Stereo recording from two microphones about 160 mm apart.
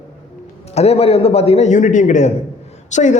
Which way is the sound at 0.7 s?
40° left (ahead or behind).